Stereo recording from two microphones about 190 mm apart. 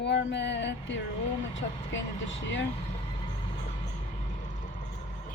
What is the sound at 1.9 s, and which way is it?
Speech, 75° left (ahead or behind).